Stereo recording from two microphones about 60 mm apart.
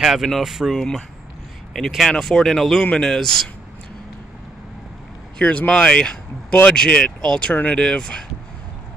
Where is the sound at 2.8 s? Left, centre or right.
Centre.